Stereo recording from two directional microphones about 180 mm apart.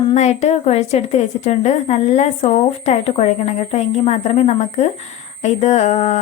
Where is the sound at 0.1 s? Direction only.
40° left (ahead or behind).